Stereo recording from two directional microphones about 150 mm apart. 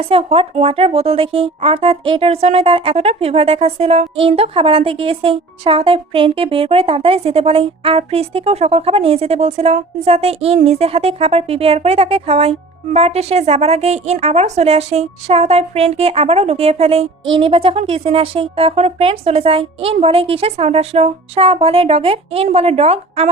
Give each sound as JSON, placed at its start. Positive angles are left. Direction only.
{"t": 0.1, "sound": "a woman's voice", "side_deg": -40}